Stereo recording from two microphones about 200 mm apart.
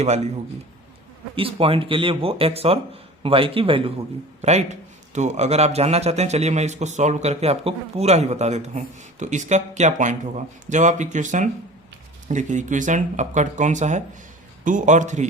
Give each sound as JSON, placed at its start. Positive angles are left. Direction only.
{"t": 1.4, "sound": "a man's voice", "side_deg": -30}